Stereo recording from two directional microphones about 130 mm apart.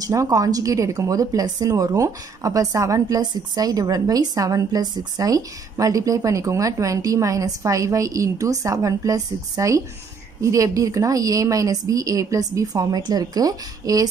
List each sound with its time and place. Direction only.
0.0 s a woman's voice: 30° right (ahead or behind)